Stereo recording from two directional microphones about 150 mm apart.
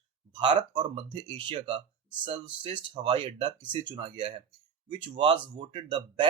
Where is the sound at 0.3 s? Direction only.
30° right (ahead or behind).